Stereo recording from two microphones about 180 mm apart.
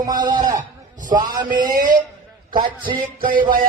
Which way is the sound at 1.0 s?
45° right (ahead or behind).